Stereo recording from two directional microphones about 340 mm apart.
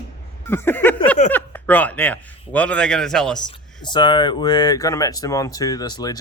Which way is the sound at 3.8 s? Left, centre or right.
Centre.